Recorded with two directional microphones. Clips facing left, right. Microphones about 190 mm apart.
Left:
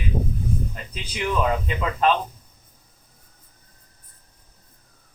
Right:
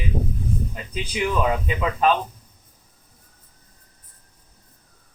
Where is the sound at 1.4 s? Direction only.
10° right (ahead or behind).